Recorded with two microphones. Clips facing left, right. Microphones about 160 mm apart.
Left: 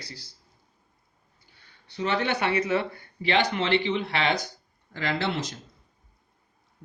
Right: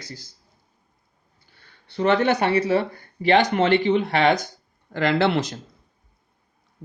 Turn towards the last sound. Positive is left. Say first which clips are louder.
# right 8 dB
turn(degrees=-65)  # may be behind; listen again after turning